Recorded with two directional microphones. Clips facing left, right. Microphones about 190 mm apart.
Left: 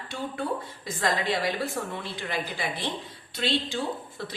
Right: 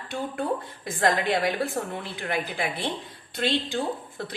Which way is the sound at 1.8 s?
30° right (ahead or behind).